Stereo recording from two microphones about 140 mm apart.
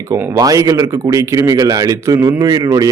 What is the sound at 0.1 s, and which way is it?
Speech, 25° right (ahead or behind).